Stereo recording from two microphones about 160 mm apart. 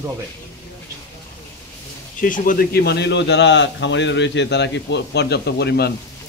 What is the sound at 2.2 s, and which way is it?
A man's voice, 60° left (ahead or behind).